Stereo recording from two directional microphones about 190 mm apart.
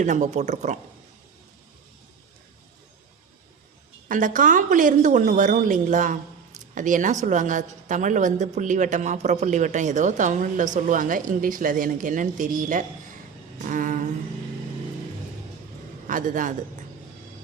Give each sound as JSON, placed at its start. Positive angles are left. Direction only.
{"t": 0.0, "sound": "a woman's voice", "side_deg": -40}
{"t": 4.1, "sound": "a woman's voice", "side_deg": -45}
{"t": 13.7, "sound": "a sound", "side_deg": -45}
{"t": 16.0, "sound": "a woman's voice", "side_deg": -45}